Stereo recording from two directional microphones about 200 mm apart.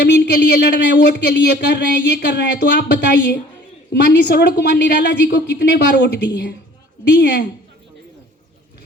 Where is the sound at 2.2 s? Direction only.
60° left (ahead or behind).